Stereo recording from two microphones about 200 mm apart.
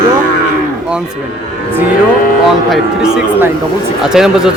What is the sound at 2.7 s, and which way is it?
Speech, 5° right (ahead or behind).